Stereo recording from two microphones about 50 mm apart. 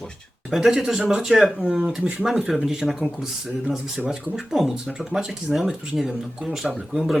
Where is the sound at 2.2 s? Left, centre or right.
Centre.